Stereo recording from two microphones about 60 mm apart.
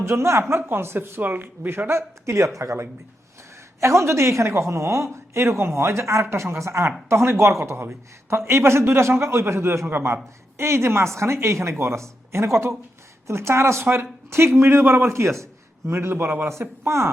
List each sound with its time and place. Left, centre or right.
0.0 s a man's voice: right
16.5 s speech: right